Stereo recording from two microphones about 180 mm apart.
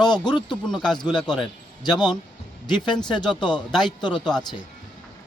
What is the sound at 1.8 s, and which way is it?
Speech, 25° left (ahead or behind).